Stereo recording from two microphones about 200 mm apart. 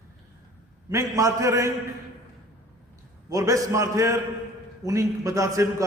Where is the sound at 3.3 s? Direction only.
15° right (ahead or behind).